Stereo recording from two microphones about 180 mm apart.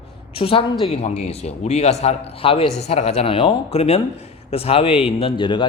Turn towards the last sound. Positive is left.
turn(degrees=25)  # may be behind; listen again after turning